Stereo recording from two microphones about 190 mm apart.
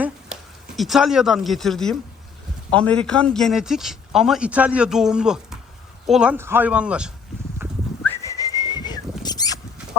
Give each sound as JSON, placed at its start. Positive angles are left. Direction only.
{"t": 0.8, "sound": "speech", "side_deg": 0}
{"t": 7.6, "sound": "livestock", "side_deg": -10}
{"t": 8.0, "sound": "whistling", "side_deg": 15}